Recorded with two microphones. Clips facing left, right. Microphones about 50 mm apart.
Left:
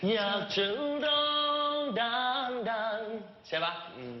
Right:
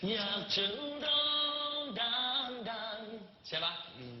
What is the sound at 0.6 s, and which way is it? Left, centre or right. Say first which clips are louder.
Music: left 7 dB; left.